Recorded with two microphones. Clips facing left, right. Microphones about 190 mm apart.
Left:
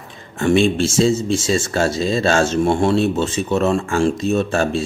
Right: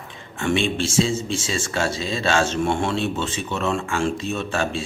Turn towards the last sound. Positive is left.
turn(degrees=40)  # may be behind; listen again after turning